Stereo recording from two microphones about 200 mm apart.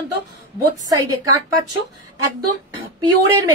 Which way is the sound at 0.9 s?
15° right (ahead or behind).